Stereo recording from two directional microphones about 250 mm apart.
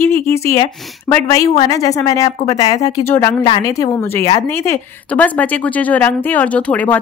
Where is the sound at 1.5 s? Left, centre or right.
Centre.